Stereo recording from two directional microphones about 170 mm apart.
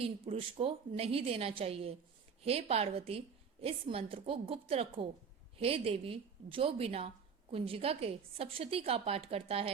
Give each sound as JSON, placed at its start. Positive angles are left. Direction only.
{"t": 0.0, "sound": "a woman's voice", "side_deg": -35}